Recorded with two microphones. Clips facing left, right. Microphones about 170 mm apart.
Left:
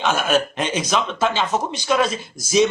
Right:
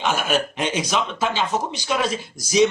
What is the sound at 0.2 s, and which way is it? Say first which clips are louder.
Speech: left 3 dB; 15° right (ahead or behind).